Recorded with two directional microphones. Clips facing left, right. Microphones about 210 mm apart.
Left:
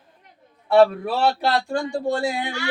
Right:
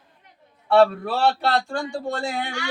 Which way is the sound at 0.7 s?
10° left (ahead or behind).